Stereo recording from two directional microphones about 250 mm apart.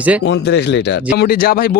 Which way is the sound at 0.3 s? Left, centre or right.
Left.